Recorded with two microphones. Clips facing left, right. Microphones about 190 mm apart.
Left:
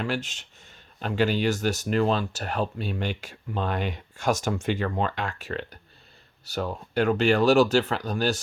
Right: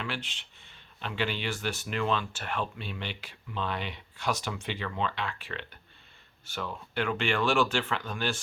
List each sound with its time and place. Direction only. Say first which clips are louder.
0.0 s speech: left 8 dB; 45° left (ahead or behind)